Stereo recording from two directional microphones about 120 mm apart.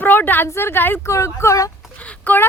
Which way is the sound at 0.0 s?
15° left (ahead or behind).